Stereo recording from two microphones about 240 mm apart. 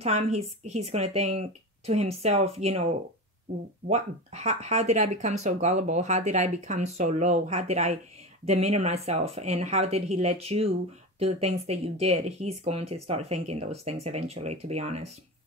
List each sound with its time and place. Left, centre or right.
0.0 s speech: right
3.9 s speech: right